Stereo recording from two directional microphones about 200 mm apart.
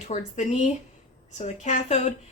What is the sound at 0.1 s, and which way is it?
A woman's voice, 35° left (ahead or behind).